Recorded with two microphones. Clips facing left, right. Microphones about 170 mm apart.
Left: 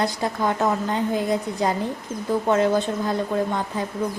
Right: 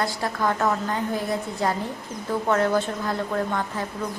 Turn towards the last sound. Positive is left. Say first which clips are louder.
# left 2 dB
turn(degrees=15)  # may be behind; listen again after turning